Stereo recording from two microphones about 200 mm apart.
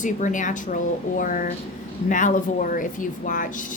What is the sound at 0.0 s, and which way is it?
A woman's voice, 40° left (ahead or behind).